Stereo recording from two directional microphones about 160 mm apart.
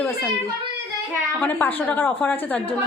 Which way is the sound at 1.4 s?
10° left (ahead or behind).